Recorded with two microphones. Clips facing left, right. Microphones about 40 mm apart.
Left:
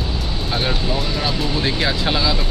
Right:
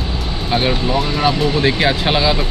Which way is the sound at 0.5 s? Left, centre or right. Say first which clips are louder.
Right 6 dB; right.